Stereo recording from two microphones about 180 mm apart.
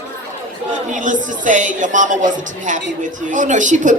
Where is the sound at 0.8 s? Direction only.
45° right (ahead or behind).